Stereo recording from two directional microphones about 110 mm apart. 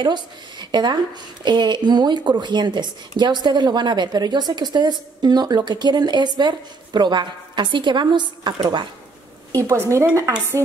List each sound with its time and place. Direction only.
0.0 s speech: 40° right (ahead or behind)
9.5 s a woman's voice: 30° right (ahead or behind)